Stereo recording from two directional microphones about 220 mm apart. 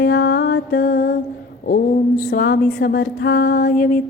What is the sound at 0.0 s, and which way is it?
Music, 50° left (ahead or behind).